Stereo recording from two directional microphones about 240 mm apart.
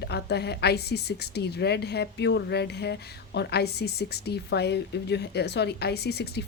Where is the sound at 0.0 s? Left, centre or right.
Left.